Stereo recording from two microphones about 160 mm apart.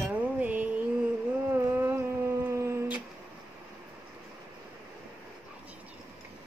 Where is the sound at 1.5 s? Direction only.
15° right (ahead or behind).